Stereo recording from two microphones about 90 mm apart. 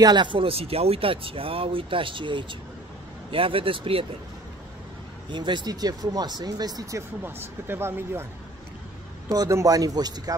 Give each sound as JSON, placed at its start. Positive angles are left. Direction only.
{"t": 0.0, "sound": "speech", "side_deg": -55}
{"t": 3.3, "sound": "speech", "side_deg": -85}
{"t": 5.3, "sound": "speech", "side_deg": -60}
{"t": 7.2, "sound": "speech", "side_deg": -25}
{"t": 9.3, "sound": "speech", "side_deg": -40}